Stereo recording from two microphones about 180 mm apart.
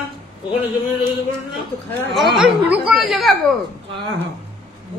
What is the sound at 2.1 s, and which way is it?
A woman's voice, centre (ahead or behind).